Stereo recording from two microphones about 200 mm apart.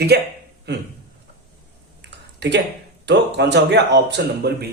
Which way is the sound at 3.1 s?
60° right (ahead or behind).